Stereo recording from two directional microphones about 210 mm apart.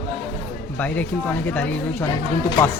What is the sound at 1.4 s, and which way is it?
Speech, 10° left (ahead or behind).